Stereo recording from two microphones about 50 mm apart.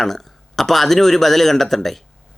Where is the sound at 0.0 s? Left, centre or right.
Centre.